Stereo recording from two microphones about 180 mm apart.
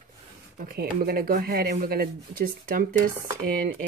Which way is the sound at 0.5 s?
55° right (ahead or behind).